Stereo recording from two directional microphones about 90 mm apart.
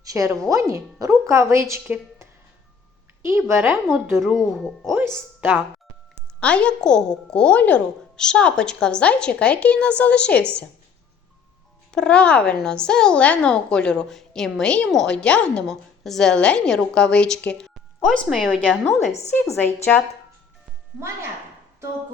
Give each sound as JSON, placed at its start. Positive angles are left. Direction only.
{"t": 0.0, "sound": "a woman's voice", "side_deg": -40}
{"t": 3.2, "sound": "speech", "side_deg": -30}
{"t": 4.2, "sound": "speech", "side_deg": -5}
{"t": 4.9, "sound": "speech", "side_deg": -25}
{"t": 6.4, "sound": "speech", "side_deg": 10}
{"t": 11.9, "sound": "speech", "side_deg": 10}
{"t": 18.0, "sound": "speech", "side_deg": 0}
{"t": 19.5, "sound": "a woman's voice", "side_deg": 20}